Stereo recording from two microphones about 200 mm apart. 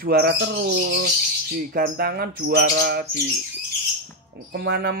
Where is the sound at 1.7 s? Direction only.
50° right (ahead or behind).